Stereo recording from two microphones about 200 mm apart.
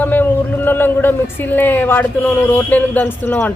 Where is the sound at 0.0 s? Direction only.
10° left (ahead or behind).